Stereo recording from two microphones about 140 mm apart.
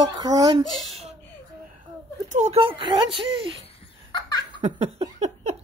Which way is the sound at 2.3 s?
55° right (ahead or behind).